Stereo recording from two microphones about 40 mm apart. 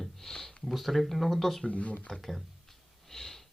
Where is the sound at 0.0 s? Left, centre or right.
Centre.